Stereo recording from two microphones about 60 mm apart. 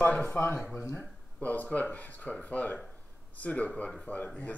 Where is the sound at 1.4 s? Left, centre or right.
Left.